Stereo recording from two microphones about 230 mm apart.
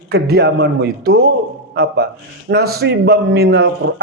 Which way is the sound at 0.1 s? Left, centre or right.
Right.